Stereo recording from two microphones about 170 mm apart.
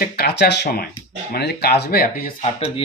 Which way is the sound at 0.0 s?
70° left (ahead or behind).